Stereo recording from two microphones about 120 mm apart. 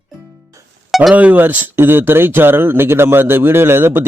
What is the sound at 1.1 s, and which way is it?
Speech, 15° right (ahead or behind).